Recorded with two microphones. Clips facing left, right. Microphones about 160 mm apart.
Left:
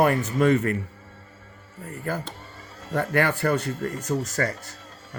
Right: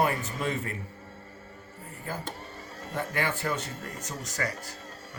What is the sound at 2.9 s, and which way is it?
Speech, 60° left (ahead or behind).